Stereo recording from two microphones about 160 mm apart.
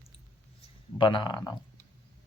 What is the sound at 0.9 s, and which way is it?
Speech, 30° left (ahead or behind).